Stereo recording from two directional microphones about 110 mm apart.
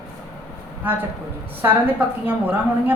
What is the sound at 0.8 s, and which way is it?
Speech, 15° right (ahead or behind).